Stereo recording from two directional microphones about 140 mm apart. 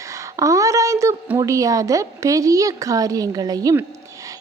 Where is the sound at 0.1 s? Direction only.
25° right (ahead or behind).